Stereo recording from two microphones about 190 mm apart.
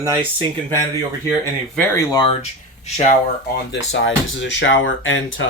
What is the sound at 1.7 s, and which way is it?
Speech, 15° left (ahead or behind).